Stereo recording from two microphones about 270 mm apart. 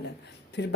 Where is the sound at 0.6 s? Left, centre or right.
Left.